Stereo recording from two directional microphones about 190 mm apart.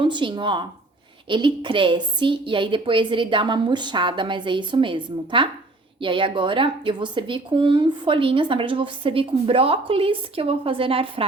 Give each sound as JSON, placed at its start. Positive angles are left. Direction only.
{"t": 0.0, "sound": "a woman's voice", "side_deg": -25}